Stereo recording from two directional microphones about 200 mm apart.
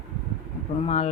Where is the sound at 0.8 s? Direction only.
30° left (ahead or behind).